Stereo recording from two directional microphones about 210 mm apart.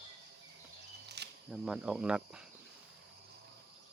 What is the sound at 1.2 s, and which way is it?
Camera, 50° right (ahead or behind).